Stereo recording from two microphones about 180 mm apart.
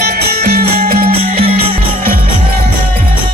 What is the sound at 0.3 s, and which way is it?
Music, 60° right (ahead or behind).